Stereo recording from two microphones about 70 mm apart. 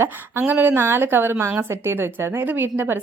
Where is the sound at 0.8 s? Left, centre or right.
Right.